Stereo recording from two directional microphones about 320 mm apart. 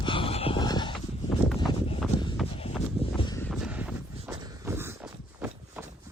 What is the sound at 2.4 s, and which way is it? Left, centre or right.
Horse, centre.